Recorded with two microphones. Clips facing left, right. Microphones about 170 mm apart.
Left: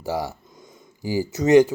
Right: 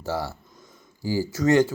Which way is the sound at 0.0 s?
15° left (ahead or behind).